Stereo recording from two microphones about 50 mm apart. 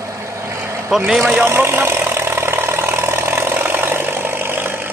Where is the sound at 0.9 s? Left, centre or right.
Centre.